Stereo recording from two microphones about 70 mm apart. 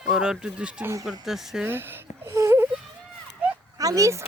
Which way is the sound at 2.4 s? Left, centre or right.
Right.